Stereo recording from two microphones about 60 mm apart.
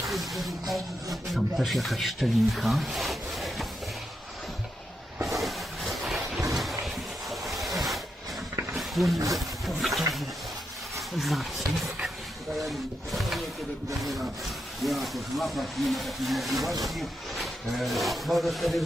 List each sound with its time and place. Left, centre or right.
0.1 s a sound: centre
1.3 s speech: centre
5.2 s hiss: centre
6.6 s a sound: centre
8.7 s roaring cats: centre
9.1 s speech: right
9.6 s a sound: centre
11.2 s speech: centre
14.8 s speech: centre